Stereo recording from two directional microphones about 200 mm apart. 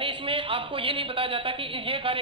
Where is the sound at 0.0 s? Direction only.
25° right (ahead or behind).